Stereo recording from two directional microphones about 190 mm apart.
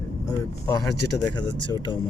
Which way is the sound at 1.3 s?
20° left (ahead or behind).